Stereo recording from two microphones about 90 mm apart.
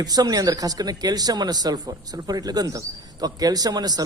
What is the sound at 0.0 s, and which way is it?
Speech, 45° right (ahead or behind).